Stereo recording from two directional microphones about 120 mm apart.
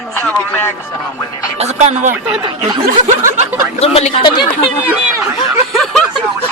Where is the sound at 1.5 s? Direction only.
65° right (ahead or behind); by 2.1 s 90° right.